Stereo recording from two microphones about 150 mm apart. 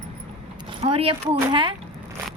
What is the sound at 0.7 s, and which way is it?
A woman's voice, 40° right (ahead or behind).